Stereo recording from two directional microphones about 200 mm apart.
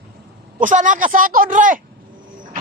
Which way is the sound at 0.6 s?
40° right (ahead or behind).